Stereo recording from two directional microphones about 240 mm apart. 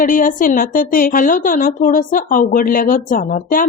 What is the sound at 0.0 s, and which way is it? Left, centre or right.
A woman's voice, left.